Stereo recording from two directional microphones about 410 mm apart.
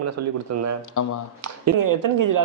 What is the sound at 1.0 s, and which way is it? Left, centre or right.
Speech, left.